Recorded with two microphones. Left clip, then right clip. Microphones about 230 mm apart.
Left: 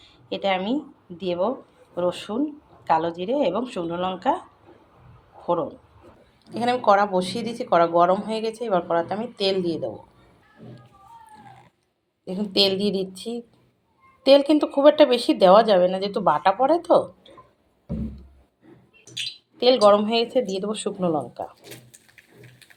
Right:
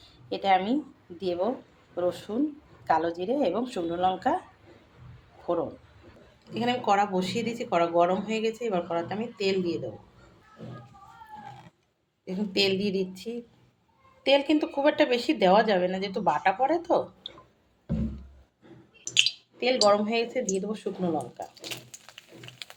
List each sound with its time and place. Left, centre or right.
0.0 s a sound: centre
1.2 s a woman's voice: centre
6.5 s a woman's voice: centre
12.2 s a woman's voice: centre
19.5 s a woman's voice: left